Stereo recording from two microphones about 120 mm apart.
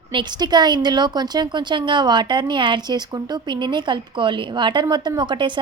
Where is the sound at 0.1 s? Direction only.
40° right (ahead or behind).